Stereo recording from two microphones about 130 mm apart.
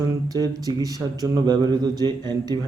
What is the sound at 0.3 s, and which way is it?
Speech, 30° right (ahead or behind).